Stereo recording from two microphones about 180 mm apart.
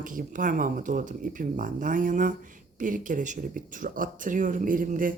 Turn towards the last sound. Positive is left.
turn(degrees=-50)  # may be behind; listen again after turning